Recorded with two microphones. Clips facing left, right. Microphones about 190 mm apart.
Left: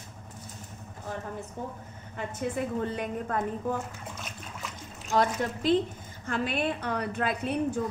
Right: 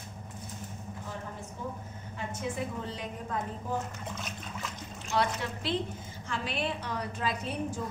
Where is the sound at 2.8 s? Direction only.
55° left (ahead or behind).